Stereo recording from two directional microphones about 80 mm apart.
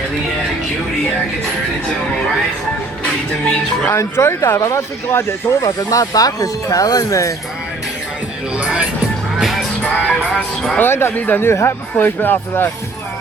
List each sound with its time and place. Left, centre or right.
3.8 s speech: left
8.5 s speech: centre
9.4 s music: centre
10.8 s speech: left